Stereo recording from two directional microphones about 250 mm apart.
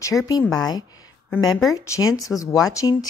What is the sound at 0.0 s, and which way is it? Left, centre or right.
A woman's voice, centre.